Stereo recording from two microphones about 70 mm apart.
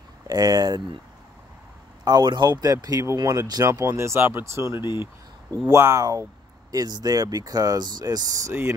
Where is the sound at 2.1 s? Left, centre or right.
Right.